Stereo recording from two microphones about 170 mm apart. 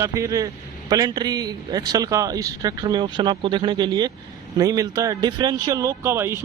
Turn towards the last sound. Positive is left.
turn(degrees=-15)  # may be behind; listen again after turning